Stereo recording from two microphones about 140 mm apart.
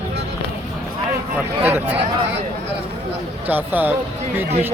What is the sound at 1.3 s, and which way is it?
Speech, 15° right (ahead or behind).